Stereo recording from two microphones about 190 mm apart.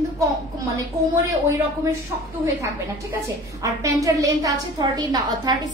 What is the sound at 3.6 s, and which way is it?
A woman's voice, 15° right (ahead or behind).